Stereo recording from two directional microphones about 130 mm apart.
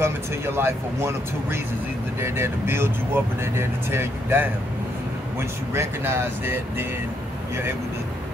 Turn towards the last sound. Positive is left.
turn(degrees=-20)  # may be behind; listen again after turning